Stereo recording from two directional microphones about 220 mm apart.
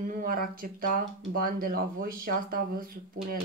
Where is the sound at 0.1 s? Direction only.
40° right (ahead or behind).